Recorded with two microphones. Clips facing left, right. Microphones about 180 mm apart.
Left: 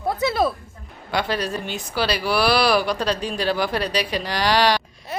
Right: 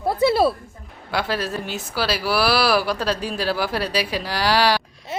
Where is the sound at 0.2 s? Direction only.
30° right (ahead or behind).